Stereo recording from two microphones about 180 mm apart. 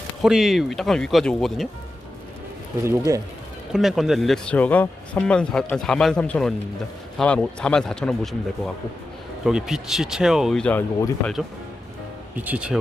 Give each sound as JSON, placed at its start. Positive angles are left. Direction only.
{"t": 0.2, "sound": "speech", "side_deg": 0}
{"t": 3.1, "sound": "speech", "side_deg": -20}
{"t": 3.7, "sound": "speech", "side_deg": 0}
{"t": 12.4, "sound": "speech", "side_deg": -5}